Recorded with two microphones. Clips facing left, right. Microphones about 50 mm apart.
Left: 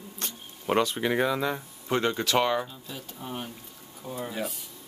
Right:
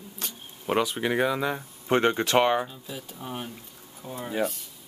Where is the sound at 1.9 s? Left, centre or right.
Right.